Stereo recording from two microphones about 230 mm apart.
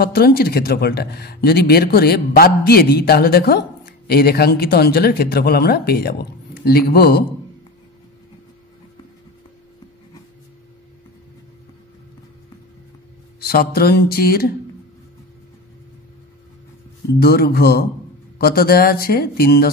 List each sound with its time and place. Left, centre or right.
0.0 s speech: left
13.4 s speech: left
17.2 s speech: left